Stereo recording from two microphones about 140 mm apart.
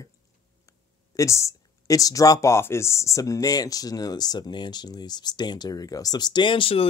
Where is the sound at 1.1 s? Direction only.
20° left (ahead or behind).